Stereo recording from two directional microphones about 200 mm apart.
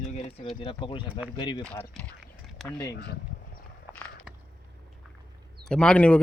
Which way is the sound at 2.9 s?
50° left (ahead or behind).